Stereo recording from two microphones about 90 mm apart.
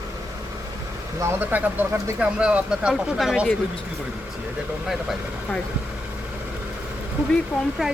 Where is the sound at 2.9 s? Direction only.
Centre (ahead or behind).